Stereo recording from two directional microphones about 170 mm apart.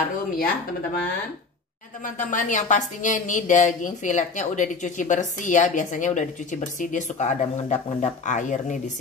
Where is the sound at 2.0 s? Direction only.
50° left (ahead or behind).